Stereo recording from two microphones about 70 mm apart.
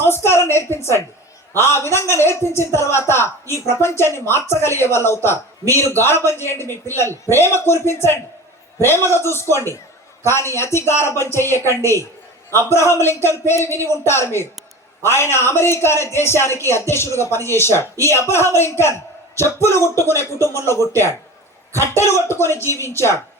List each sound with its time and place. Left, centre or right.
0.0 s a woman's voice: left
12.7 s speech: left